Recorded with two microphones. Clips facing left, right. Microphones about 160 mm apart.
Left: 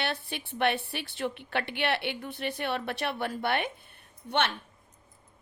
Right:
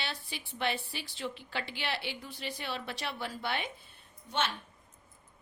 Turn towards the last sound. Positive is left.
turn(degrees=65)  # may be behind; listen again after turning